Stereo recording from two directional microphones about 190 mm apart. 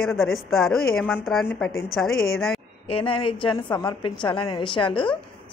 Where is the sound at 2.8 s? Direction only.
30° left (ahead or behind).